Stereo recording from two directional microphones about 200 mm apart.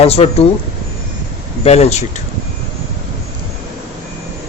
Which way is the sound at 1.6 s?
30° left (ahead or behind).